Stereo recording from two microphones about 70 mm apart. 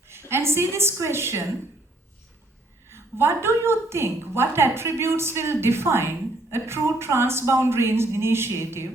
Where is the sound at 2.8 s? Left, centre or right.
Right.